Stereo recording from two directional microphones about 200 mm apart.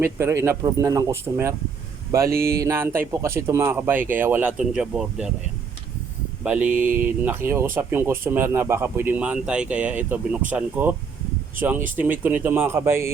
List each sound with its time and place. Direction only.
0.0 s speech: 15° right (ahead or behind)
2.3 s a sound: 50° right (ahead or behind)
2.6 s speech: 15° right (ahead or behind)
6.4 s mantra: 5° right (ahead or behind)
6.7 s mantra: 40° right (ahead or behind)
7.2 s speech: 10° right (ahead or behind)
11.9 s speech: 10° right (ahead or behind)